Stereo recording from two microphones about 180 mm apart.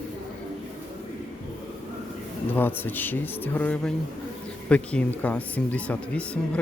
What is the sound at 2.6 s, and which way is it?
Speech, 10° left (ahead or behind).